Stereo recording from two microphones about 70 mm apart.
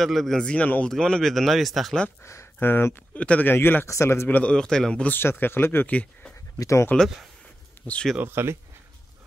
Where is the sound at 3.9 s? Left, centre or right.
Left.